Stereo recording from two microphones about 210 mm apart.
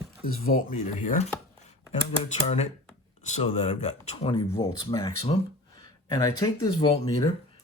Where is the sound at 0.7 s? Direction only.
35° left (ahead or behind).